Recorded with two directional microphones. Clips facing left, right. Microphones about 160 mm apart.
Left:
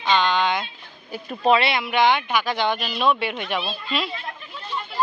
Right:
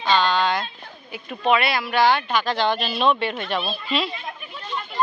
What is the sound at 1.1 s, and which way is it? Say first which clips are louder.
Speech: left 2 dB; 35° left (ahead or behind).